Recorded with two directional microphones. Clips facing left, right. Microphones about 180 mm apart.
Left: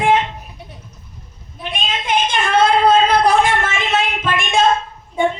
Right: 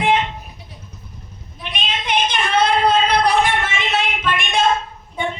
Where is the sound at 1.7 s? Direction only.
45° left (ahead or behind).